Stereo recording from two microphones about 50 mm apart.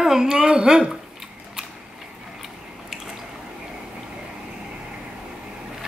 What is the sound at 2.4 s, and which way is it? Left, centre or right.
Biting, centre.